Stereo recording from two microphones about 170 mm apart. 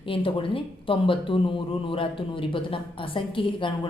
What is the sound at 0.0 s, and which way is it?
A woman's voice, 30° left (ahead or behind).